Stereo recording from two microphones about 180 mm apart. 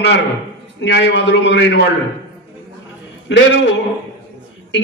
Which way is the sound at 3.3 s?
85° left.